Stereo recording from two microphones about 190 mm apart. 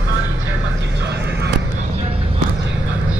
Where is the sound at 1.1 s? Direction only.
60° right (ahead or behind).